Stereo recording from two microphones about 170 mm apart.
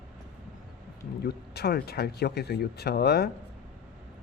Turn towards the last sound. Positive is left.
turn(degrees=70)  # may be behind; listen again after turning